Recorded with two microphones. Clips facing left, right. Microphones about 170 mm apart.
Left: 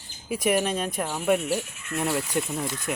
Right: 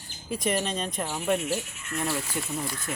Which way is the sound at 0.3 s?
10° left (ahead or behind).